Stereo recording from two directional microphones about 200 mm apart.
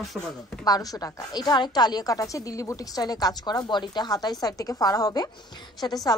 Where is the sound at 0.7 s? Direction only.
20° left (ahead or behind).